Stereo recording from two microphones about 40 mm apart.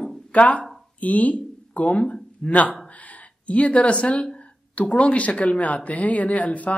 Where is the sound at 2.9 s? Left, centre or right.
Left.